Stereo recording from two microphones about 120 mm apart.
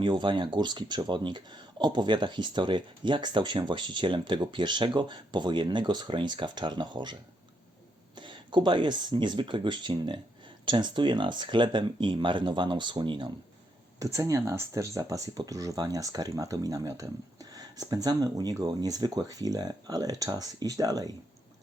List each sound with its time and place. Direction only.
0.0 s speech: 40° right (ahead or behind)
14.0 s speech: 25° right (ahead or behind)